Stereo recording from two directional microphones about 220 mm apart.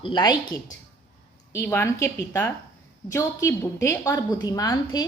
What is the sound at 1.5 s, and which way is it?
A woman's voice, 10° left (ahead or behind).